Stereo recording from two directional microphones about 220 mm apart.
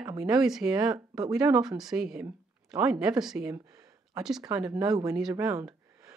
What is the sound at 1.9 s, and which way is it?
Speech, 5° right (ahead or behind).